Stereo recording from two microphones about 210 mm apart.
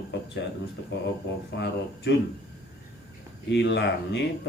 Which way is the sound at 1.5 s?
55° left (ahead or behind).